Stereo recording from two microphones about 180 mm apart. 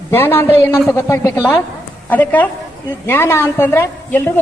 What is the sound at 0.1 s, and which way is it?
A woman's voice, 15° left (ahead or behind).